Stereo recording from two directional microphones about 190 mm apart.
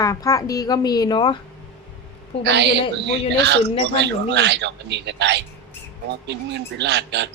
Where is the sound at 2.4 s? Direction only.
65° right (ahead or behind).